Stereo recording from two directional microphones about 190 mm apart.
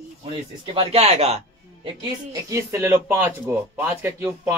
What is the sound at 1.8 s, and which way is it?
Speech, 20° right (ahead or behind).